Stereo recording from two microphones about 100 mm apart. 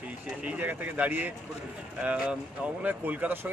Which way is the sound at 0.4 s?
15° right (ahead or behind).